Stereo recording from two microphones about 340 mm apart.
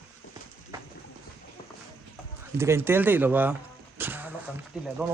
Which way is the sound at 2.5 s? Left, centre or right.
Centre.